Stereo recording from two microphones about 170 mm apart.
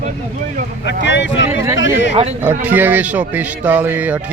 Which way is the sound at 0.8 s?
90° left.